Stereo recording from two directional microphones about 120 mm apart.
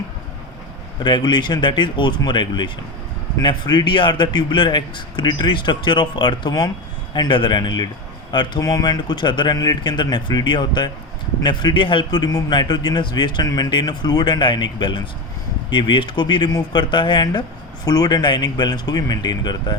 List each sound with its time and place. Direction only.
1.0 s speech: 40° left (ahead or behind)